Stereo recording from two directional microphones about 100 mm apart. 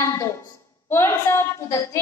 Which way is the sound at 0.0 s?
30° left (ahead or behind).